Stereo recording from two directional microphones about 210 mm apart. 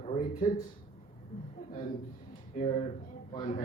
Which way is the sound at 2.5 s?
30° left (ahead or behind).